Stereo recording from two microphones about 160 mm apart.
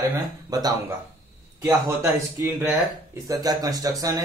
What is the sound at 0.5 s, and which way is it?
Speech, 25° right (ahead or behind).